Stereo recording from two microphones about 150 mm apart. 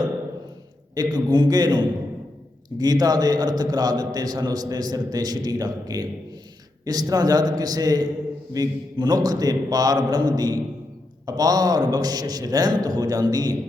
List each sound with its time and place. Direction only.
0.9 s a man's voice: 25° right (ahead or behind)